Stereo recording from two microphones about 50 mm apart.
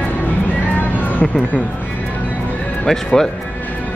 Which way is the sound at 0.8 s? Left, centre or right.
Left.